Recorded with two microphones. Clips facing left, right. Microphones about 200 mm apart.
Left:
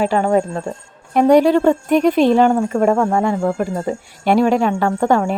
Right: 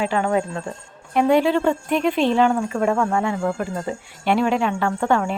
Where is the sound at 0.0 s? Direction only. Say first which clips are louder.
Left 5 dB; 40° left (ahead or behind).